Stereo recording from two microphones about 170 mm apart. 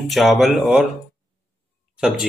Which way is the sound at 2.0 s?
Centre (ahead or behind).